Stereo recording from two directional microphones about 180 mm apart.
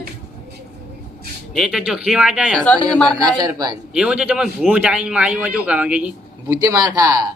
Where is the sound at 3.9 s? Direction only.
5° right (ahead or behind).